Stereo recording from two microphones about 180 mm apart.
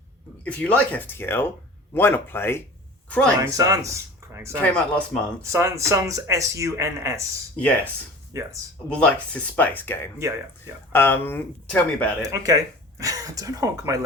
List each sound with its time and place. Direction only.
0.4 s speech: 10° left (ahead or behind)
3.4 s speech: 20° right (ahead or behind)
4.6 s speech: 5° left (ahead or behind)
5.4 s speech: 15° right (ahead or behind)
7.6 s speech: 10° left (ahead or behind)
8.3 s speech: 15° right (ahead or behind)
8.9 s speech: 5° left (ahead or behind)
12.2 s speech: 20° right (ahead or behind)